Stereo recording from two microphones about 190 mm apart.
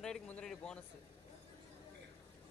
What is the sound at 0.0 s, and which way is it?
Speech, 5° left (ahead or behind).